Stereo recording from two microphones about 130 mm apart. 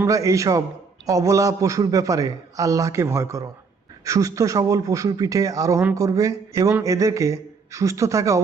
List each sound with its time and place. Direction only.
0.0 s a man's voice: 25° right (ahead or behind)